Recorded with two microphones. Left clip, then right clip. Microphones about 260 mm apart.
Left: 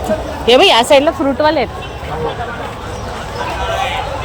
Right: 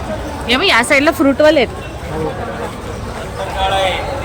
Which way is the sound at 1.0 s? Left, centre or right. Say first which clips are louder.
Right 2 dB; centre.